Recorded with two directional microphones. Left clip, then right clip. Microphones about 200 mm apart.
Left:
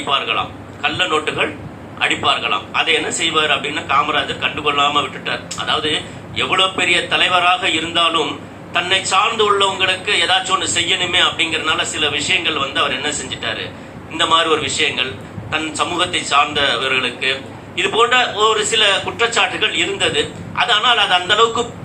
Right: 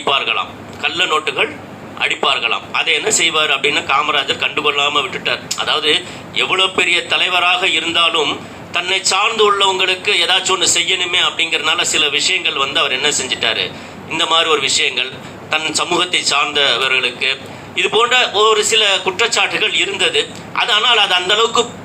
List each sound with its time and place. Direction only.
0.1 s a man's voice: 45° right (ahead or behind)